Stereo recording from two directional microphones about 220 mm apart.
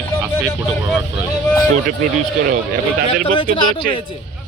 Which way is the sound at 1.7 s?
35° right (ahead or behind).